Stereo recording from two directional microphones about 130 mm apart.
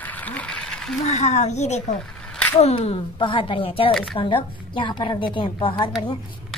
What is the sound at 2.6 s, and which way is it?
Speech, 50° left (ahead or behind).